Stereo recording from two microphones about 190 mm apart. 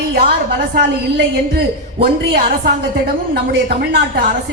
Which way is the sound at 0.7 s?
55° right (ahead or behind).